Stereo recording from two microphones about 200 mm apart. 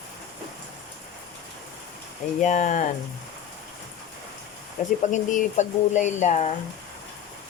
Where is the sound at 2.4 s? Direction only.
35° left (ahead or behind).